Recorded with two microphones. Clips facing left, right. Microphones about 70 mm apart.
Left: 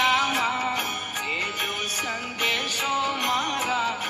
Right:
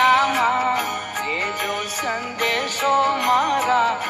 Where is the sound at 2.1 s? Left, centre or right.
Right.